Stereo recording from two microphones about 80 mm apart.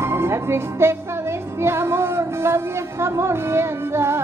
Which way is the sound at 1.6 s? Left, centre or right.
Right.